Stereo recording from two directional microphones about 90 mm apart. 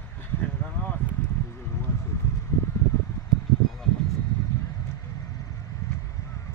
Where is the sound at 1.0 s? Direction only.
20° left (ahead or behind).